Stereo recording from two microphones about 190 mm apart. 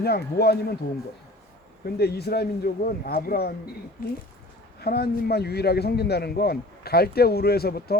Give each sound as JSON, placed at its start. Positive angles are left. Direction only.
{"t": 0.0, "sound": "a man's voice", "side_deg": 55}
{"t": 2.0, "sound": "a man's voice", "side_deg": 55}
{"t": 4.8, "sound": "a man's voice", "side_deg": 55}